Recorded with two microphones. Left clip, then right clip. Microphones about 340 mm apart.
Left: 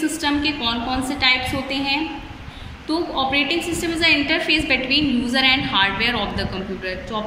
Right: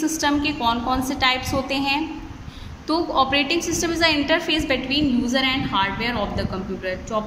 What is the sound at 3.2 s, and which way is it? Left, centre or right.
A woman's voice, right.